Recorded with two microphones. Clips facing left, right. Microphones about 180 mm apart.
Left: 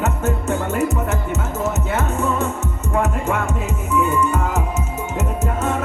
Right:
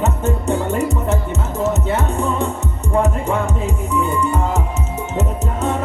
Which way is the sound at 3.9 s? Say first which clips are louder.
Left 2 dB; 15° right (ahead or behind).